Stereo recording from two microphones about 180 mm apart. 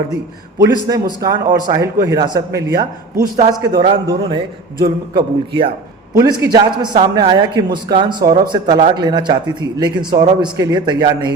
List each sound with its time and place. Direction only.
0.6 s a man's voice: 20° right (ahead or behind)